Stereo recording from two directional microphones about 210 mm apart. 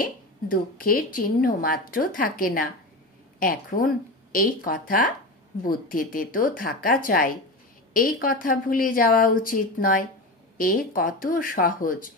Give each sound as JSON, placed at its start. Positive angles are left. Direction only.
{"t": 0.0, "sound": "speech", "side_deg": 40}